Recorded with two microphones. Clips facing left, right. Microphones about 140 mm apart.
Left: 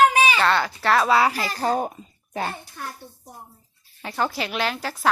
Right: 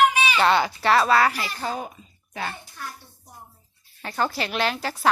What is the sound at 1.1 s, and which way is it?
Speech, 10° left (ahead or behind).